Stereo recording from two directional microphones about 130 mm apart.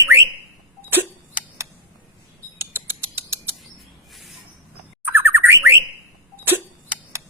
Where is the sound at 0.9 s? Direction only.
15° right (ahead or behind).